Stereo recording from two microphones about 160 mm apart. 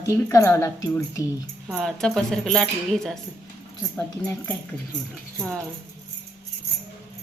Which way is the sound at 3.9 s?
15° left (ahead or behind).